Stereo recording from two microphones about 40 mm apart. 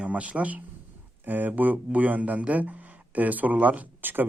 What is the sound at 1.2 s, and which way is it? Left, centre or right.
Speech, right.